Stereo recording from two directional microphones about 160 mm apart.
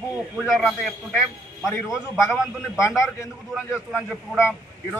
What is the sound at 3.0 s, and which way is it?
A man's voice, 15° left (ahead or behind).